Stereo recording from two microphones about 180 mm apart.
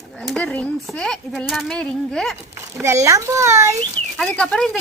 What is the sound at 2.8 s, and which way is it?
Speech, 15° right (ahead or behind).